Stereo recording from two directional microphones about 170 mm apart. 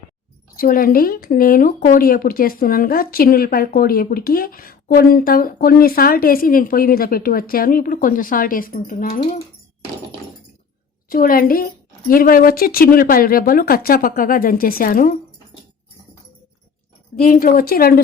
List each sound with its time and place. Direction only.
0.5 s speech: 55° left (ahead or behind)
11.1 s speech: 55° left (ahead or behind)
17.2 s speech: 60° left (ahead or behind)